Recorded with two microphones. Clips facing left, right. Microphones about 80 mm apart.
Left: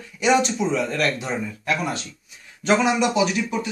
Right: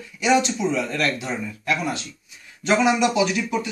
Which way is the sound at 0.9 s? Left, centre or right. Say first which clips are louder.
Left 1 dB; left.